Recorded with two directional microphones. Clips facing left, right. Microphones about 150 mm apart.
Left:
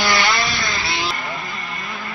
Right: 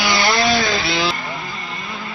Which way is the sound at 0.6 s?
90° right.